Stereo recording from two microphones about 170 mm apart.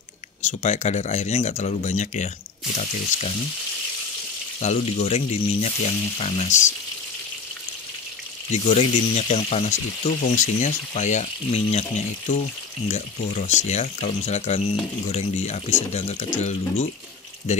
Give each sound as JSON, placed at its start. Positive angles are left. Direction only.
{"t": 0.4, "sound": "speech", "side_deg": 40}
{"t": 4.6, "sound": "speech", "side_deg": 40}
{"t": 8.5, "sound": "speech", "side_deg": 40}
{"t": 12.8, "sound": "speech", "side_deg": 40}